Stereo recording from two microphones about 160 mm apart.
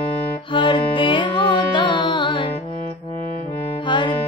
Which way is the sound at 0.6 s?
30° left (ahead or behind).